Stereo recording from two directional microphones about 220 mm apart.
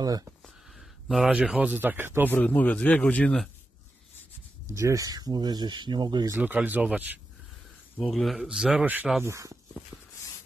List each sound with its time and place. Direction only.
0.0 s speech: 15° right (ahead or behind)
0.7 s speech: centre (ahead or behind)
2.3 s speech: 5° left (ahead or behind)
4.6 s speech: 15° right (ahead or behind)